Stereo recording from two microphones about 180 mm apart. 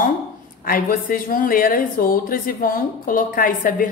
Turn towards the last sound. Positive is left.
turn(degrees=50)  # may be behind; listen again after turning